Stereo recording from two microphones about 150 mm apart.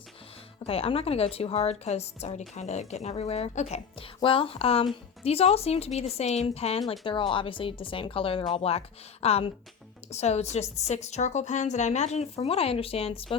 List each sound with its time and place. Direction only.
0.6 s a woman's voice: 40° left (ahead or behind)
3.9 s a woman's voice: 35° left (ahead or behind)